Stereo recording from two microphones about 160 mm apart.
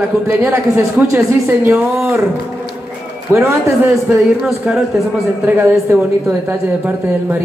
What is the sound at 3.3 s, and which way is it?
Speech, 15° right (ahead or behind).